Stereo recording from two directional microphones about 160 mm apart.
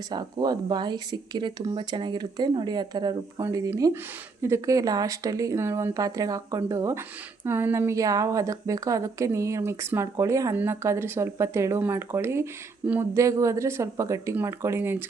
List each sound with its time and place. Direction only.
0.1 s a woman's voice: 25° right (ahead or behind)